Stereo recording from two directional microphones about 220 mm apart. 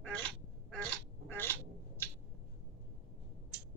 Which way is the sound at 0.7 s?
5° left (ahead or behind).